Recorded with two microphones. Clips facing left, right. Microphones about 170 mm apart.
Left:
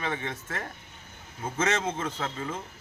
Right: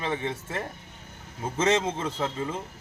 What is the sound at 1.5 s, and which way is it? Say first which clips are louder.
Speech: right 4 dB; 30° right (ahead or behind).